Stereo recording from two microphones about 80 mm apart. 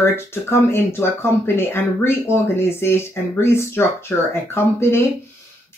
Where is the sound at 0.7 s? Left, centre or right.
Left.